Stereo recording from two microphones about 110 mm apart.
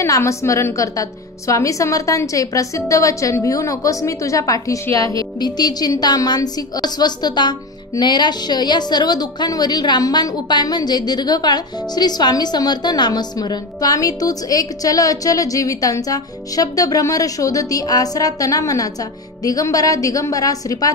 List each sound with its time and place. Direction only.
0.0 s a woman's voice: 25° left (ahead or behind)